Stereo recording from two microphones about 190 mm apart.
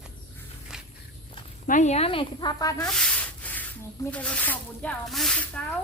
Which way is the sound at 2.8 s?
5° left (ahead or behind).